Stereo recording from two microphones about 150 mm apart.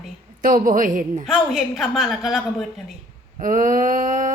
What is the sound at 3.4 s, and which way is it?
Speech, 60° right (ahead or behind).